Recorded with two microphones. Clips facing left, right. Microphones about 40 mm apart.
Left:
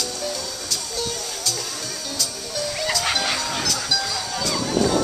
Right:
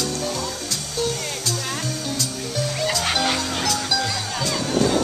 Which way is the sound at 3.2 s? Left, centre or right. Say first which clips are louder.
Right 2 dB; centre.